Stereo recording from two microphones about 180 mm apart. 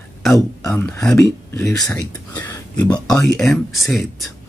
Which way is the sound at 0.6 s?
15° left (ahead or behind).